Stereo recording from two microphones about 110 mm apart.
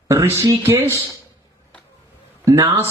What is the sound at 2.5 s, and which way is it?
Speech, 30° right (ahead or behind).